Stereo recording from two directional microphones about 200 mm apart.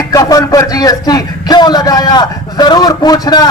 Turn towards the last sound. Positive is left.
turn(degrees=20)  # may be behind; listen again after turning